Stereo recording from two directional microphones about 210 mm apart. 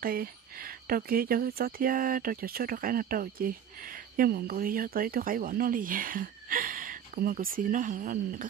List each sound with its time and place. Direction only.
0.0 s speech: 45° right (ahead or behind)